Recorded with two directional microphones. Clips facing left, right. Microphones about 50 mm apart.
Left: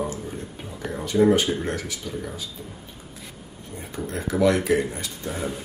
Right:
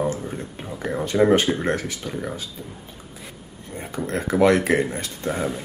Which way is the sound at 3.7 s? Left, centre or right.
Right.